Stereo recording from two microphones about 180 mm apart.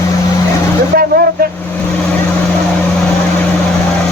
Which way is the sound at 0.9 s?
60° right (ahead or behind).